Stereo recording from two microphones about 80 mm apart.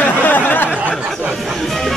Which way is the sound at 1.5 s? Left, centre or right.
Centre.